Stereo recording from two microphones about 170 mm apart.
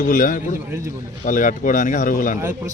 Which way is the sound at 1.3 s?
50° left (ahead or behind).